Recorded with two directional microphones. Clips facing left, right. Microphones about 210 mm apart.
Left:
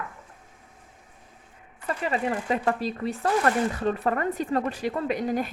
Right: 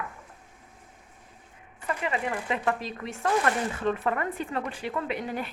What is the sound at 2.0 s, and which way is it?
A woman's voice, 35° left (ahead or behind).